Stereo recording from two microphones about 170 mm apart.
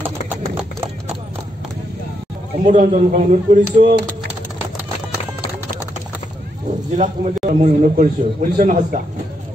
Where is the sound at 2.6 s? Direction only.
50° right (ahead or behind).